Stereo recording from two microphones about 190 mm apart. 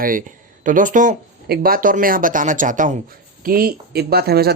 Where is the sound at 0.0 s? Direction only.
45° right (ahead or behind).